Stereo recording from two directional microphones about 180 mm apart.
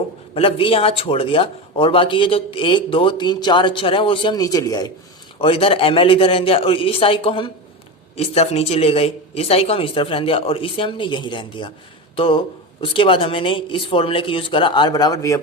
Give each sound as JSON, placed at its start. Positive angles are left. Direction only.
{"t": 0.3, "sound": "speech", "side_deg": 30}
{"t": 5.4, "sound": "speech", "side_deg": 30}